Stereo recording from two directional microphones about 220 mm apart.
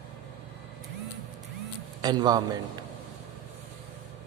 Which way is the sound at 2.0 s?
20° right (ahead or behind).